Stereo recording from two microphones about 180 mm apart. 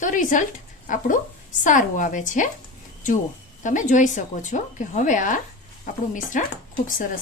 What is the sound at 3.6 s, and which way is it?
Speech, 45° left (ahead or behind).